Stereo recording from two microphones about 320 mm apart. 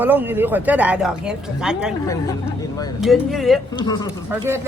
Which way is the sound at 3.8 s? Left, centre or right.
Centre.